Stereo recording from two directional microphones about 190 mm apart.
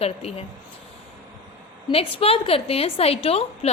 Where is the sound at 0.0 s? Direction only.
30° left (ahead or behind).